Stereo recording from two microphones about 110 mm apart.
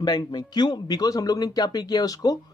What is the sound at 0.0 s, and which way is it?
Speech, 35° left (ahead or behind).